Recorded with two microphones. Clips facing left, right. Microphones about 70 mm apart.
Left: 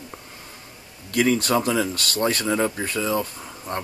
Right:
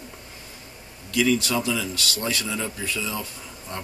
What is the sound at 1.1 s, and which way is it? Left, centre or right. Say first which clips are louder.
Speech: left 2 dB; left.